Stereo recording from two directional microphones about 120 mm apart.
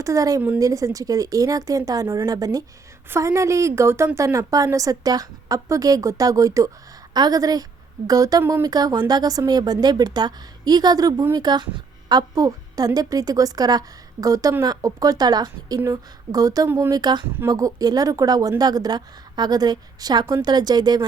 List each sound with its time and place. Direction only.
0.0 s a woman's voice: 30° right (ahead or behind)
16.6 s a woman's voice: 20° right (ahead or behind)
16.9 s speech: 35° right (ahead or behind)